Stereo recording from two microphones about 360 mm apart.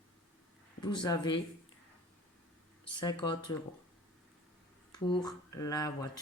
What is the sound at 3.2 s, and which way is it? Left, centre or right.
Speech, centre.